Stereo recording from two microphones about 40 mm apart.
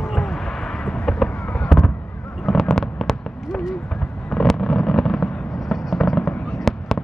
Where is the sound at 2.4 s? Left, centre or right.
Centre.